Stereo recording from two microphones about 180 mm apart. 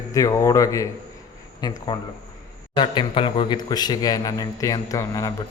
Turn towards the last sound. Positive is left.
turn(degrees=20)  # may be behind; listen again after turning